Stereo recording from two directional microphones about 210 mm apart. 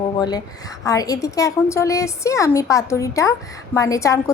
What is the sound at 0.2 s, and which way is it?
A woman's voice, 20° left (ahead or behind).